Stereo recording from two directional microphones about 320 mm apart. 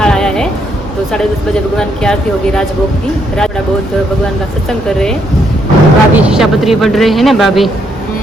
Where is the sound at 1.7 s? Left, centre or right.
Centre.